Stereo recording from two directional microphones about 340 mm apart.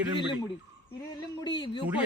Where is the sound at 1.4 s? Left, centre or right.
Centre.